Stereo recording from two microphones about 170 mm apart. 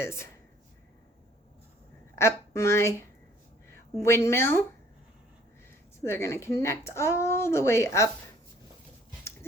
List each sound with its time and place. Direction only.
0.0 s a woman's voice: 15° left (ahead or behind)
2.1 s a woman's voice: 15° left (ahead or behind)
6.0 s a woman's voice: 15° left (ahead or behind)